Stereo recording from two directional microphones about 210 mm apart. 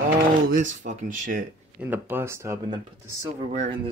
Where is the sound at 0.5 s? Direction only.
40° right (ahead or behind).